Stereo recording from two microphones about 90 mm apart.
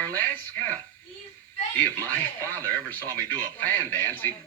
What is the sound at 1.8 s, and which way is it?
Speech, 20° left (ahead or behind).